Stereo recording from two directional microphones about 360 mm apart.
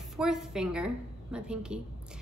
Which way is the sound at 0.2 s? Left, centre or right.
Centre.